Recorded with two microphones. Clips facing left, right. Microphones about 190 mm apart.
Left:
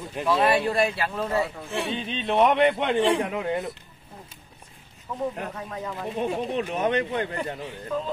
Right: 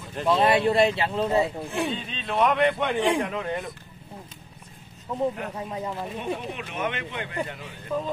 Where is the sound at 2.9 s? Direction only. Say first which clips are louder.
Left 2 dB; 10° right (ahead or behind).